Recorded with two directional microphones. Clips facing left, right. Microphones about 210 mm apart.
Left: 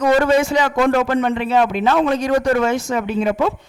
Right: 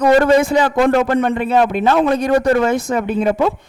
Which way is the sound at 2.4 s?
35° right (ahead or behind).